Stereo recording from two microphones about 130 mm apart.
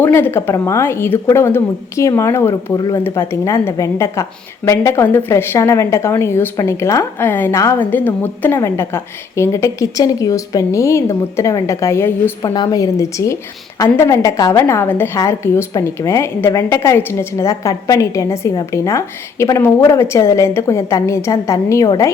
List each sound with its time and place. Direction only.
0.0 s a woman's voice: 15° left (ahead or behind)
2.7 s speech: 30° left (ahead or behind)
3.0 s a woman's voice: 20° left (ahead or behind)
12.4 s a woman's voice: 30° left (ahead or behind)